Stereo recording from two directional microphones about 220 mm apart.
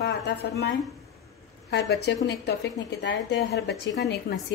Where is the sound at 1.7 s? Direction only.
50° left (ahead or behind).